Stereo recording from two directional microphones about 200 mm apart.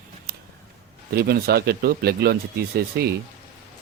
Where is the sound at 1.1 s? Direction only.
50° right (ahead or behind).